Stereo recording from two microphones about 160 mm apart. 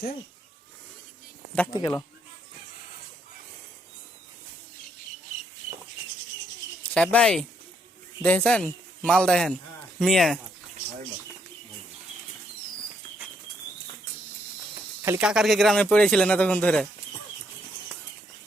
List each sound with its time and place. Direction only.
1.7 s speech: 25° left (ahead or behind)
6.8 s a man's voice: 10° left (ahead or behind)
15.0 s speech: 15° right (ahead or behind)
15.3 s speech: centre (ahead or behind)